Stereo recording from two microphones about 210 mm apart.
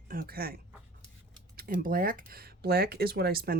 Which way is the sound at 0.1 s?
45° right (ahead or behind).